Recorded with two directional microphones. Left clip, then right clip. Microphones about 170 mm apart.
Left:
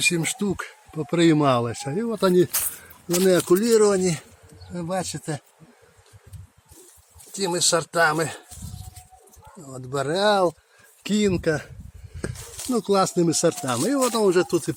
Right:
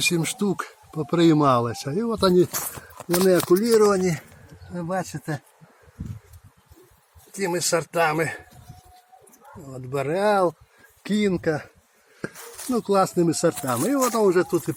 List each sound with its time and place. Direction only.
0.0 s speech: centre (ahead or behind)
3.5 s speech: centre (ahead or behind)
3.9 s speech: 20° left (ahead or behind)
4.7 s speech: 5° left (ahead or behind)
7.3 s speech: centre (ahead or behind)
9.6 s speech: 5° left (ahead or behind)
14.3 s speech: 25° left (ahead or behind)